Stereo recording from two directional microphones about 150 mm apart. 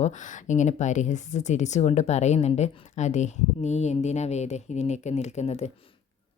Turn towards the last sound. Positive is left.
turn(degrees=50)  # may be behind; listen again after turning